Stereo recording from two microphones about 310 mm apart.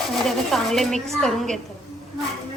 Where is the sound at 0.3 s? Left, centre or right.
Centre.